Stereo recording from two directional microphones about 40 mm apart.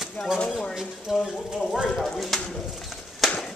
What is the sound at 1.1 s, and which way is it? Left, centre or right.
Speech, centre.